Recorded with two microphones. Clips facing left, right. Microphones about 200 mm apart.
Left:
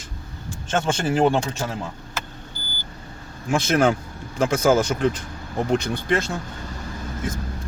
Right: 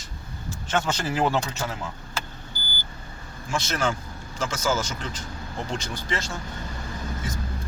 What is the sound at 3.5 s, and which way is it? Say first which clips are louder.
Speech: left 8 dB; 55° left (ahead or behind).